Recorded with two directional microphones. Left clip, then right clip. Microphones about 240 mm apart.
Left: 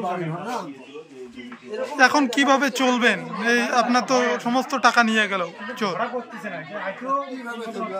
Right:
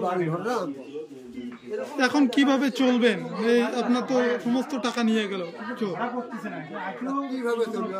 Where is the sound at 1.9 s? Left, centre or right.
Centre.